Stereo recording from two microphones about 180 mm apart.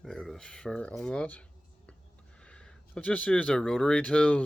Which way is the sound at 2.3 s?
5° left (ahead or behind).